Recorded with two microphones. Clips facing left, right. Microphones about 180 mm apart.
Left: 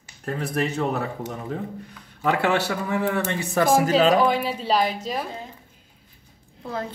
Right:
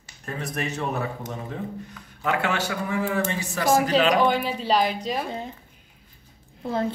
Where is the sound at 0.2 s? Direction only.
60° left (ahead or behind).